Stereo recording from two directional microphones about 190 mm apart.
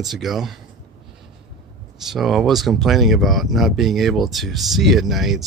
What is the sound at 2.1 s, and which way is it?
Speech, centre (ahead or behind).